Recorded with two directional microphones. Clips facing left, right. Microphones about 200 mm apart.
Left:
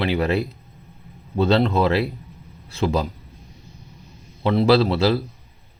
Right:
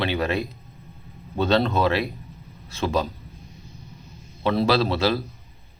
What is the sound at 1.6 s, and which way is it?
Speech, 25° left (ahead or behind).